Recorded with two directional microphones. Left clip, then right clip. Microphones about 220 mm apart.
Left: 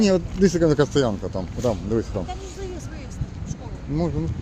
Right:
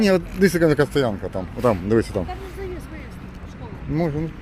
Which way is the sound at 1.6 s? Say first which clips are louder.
Right 5 dB; 10° right (ahead or behind).